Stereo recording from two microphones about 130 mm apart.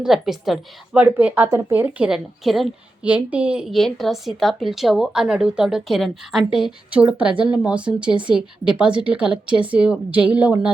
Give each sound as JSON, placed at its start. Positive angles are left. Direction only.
{"t": 0.0, "sound": "a woman's voice", "side_deg": 0}
{"t": 1.2, "sound": "a woman's voice", "side_deg": -15}